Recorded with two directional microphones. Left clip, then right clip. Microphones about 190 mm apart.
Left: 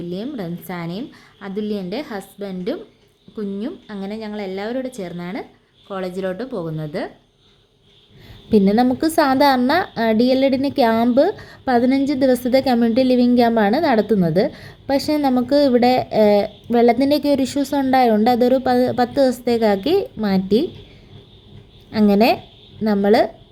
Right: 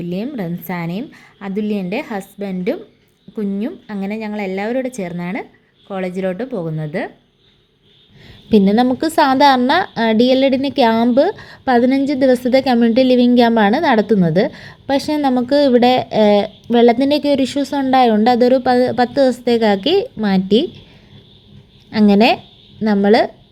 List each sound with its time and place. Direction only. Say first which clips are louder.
0.1 s a woman's voice: right 5 dB; 15° right (ahead or behind)
8.4 s a woman's voice: right 2 dB; 20° right (ahead or behind)
21.8 s a woman's voice: right 3 dB; 20° right (ahead or behind)